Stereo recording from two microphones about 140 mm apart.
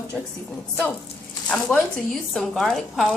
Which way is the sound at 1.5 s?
5° left (ahead or behind).